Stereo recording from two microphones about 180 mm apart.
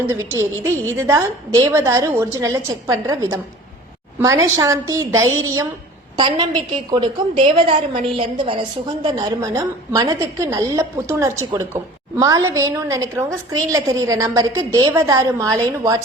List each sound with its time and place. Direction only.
0.6 s a woman's voice: 15° right (ahead or behind)